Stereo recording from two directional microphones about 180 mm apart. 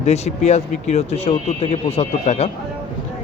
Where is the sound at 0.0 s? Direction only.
40° left (ahead or behind).